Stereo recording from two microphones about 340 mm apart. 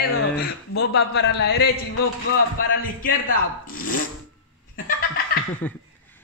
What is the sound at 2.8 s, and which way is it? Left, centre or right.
Speech, left.